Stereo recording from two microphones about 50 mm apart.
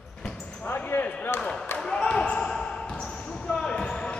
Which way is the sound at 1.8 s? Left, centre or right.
Centre.